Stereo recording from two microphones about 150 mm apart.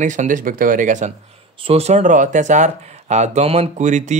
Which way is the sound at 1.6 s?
40° right (ahead or behind).